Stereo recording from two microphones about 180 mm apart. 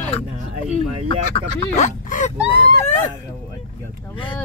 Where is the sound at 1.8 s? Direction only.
45° left (ahead or behind).